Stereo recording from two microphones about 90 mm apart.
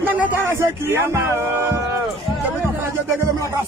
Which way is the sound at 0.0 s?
25° right (ahead or behind).